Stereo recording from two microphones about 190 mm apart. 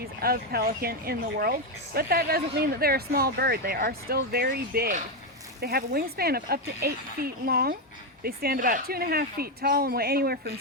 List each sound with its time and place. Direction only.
0.0 s speech: 55° right (ahead or behind)